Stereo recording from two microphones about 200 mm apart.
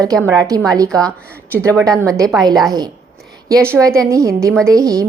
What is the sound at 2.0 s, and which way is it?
A woman's voice, 15° right (ahead or behind).